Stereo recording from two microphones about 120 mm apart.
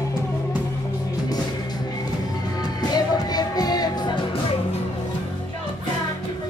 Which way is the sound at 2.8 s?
35° left (ahead or behind).